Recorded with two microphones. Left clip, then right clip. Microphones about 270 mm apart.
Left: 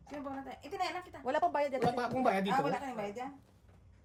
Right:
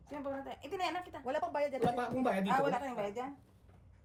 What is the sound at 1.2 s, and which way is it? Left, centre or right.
Speech, left.